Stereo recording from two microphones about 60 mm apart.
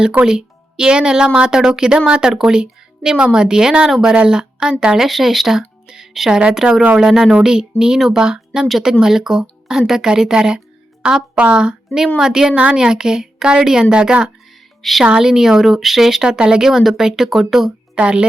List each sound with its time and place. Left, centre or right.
0.3 s speech: centre
5.0 s speech: centre
14.8 s a woman's voice: centre
15.0 s speech: centre
17.9 s speech: centre